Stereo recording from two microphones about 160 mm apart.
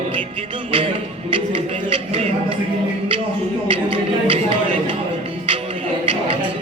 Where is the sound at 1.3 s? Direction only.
35° right (ahead or behind).